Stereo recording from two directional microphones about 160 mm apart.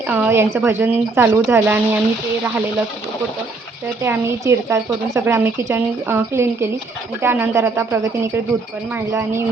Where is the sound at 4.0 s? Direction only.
15° right (ahead or behind).